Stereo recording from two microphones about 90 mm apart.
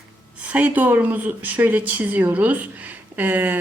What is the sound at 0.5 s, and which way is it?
A woman's voice, 20° right (ahead or behind).